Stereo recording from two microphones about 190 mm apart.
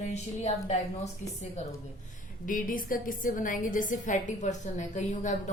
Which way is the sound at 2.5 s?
45° left (ahead or behind).